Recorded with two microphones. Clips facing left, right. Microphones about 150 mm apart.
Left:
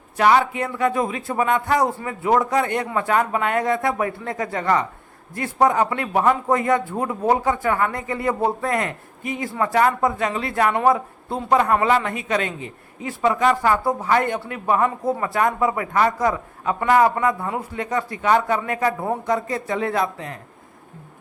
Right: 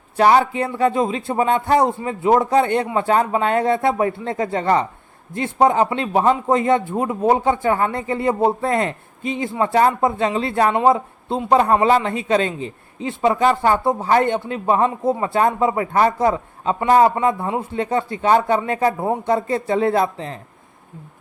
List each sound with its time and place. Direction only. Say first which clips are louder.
0.2 s speech: right 3 dB; 30° right (ahead or behind)